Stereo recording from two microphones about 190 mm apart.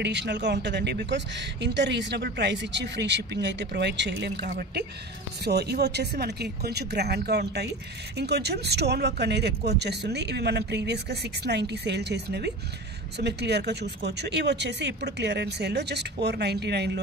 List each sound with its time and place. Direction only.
0.0 s a woman's voice: 65° right (ahead or behind)
4.5 s a woman's voice: 50° right (ahead or behind)